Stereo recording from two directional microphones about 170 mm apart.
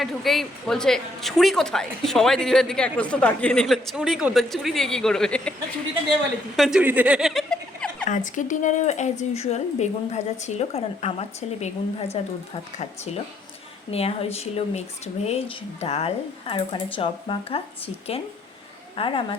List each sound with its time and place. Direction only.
0.0 s speech: centre (ahead or behind)
6.6 s speech: 5° right (ahead or behind)
8.0 s a woman's voice: 50° left (ahead or behind)
13.9 s a woman's voice: 35° left (ahead or behind)